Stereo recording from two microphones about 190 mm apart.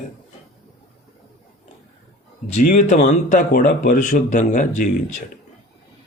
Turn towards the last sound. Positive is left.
turn(degrees=40)  # may be behind; listen again after turning